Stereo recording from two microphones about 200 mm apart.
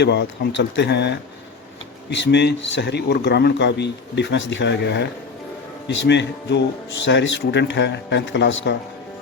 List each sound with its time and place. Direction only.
0.0 s a man's voice: 60° left (ahead or behind)
6.1 s a man's voice: 60° left (ahead or behind)